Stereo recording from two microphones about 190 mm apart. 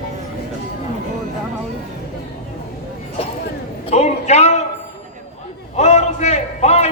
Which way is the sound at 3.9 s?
35° left (ahead or behind).